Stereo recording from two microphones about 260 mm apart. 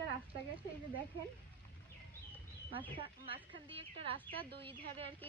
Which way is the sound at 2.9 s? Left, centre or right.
Centre.